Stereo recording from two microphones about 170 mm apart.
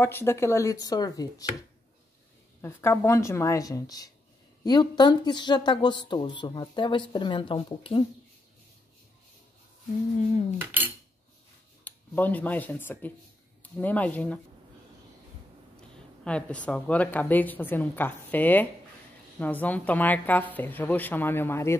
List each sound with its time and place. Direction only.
0.0 s a woman's voice: 15° left (ahead or behind)
2.6 s a woman's voice: 15° left (ahead or behind); by 8.0 s 30° left (ahead or behind)
10.6 s cutlery: 10° right (ahead or behind)
11.8 s speech: 10° left (ahead or behind)
16.3 s a woman's voice: 5° left (ahead or behind)